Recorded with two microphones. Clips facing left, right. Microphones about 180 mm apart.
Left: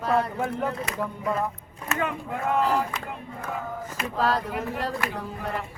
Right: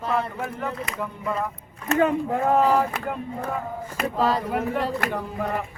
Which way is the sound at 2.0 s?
35° right (ahead or behind).